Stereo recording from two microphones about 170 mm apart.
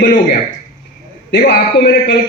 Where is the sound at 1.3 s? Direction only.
75° left (ahead or behind).